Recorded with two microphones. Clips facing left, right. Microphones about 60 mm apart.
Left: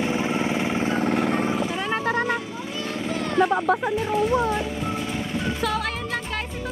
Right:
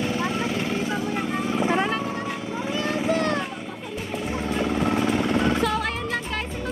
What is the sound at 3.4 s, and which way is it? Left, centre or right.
Music, left.